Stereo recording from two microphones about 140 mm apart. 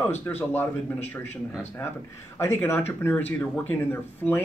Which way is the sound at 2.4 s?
15° left (ahead or behind).